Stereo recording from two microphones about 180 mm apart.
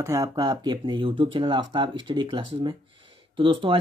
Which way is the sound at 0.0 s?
15° right (ahead or behind).